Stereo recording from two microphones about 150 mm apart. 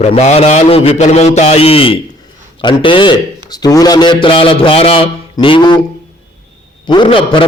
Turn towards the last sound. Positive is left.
turn(degrees=35)  # may be behind; listen again after turning